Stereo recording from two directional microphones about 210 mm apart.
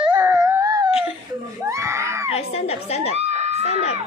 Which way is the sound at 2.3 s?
30° left (ahead or behind).